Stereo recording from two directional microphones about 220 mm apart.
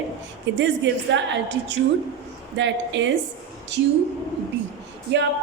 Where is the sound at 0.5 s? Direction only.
55° right (ahead or behind).